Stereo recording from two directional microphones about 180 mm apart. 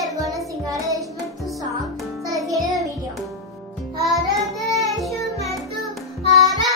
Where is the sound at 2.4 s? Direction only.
20° right (ahead or behind).